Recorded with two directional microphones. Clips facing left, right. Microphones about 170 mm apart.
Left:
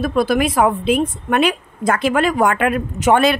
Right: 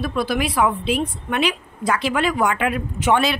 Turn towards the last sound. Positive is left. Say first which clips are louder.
# left 5 dB
turn(degrees=50)  # may be behind; listen again after turning